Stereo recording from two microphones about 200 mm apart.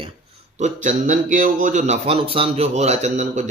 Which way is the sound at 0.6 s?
40° right (ahead or behind).